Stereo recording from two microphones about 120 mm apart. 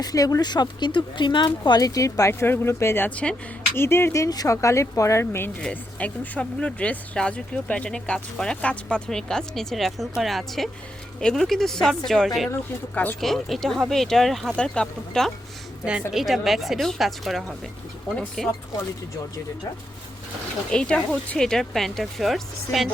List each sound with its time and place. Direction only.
0.0 s speech: 30° left (ahead or behind); by 12.5 s centre (ahead or behind)
12.9 s speech: 10° left (ahead or behind)
13.1 s speech: centre (ahead or behind)
15.8 s speech: 5° right (ahead or behind)
18.2 s speech: 10° left (ahead or behind)
20.7 s speech: 10° left (ahead or behind)